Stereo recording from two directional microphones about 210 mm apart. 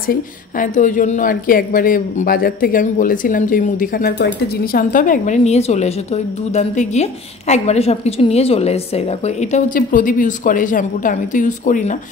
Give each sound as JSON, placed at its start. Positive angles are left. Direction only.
{"t": 0.0, "sound": "a woman's voice", "side_deg": 40}